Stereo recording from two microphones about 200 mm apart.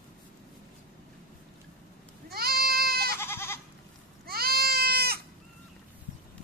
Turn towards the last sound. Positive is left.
turn(degrees=-50)  # may be behind; listen again after turning